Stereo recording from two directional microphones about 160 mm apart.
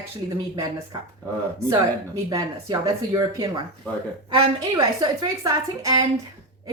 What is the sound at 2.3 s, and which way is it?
A woman's voice, 20° right (ahead or behind).